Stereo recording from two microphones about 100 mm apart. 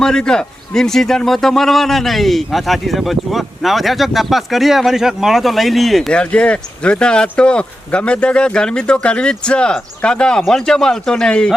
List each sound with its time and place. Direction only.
0.0 s a man's voice: 5° left (ahead or behind)